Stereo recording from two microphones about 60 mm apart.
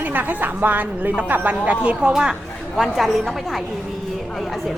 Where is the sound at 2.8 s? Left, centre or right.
Centre.